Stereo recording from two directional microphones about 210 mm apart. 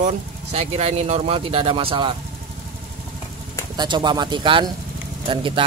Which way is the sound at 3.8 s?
20° right (ahead or behind).